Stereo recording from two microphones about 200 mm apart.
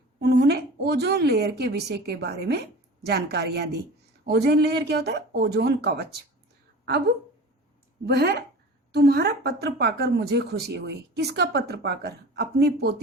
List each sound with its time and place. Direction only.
0.2 s a woman's voice: 55° right (ahead or behind)
8.0 s speech: 55° right (ahead or behind)